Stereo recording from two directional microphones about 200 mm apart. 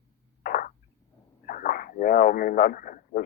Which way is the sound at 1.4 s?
45° left (ahead or behind).